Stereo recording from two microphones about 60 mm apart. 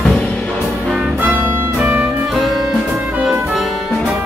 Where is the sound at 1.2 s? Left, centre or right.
Right.